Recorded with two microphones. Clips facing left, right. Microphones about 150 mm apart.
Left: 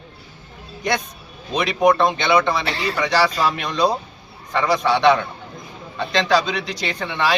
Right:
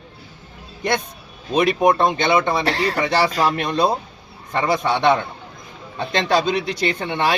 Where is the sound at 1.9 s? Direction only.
50° right (ahead or behind).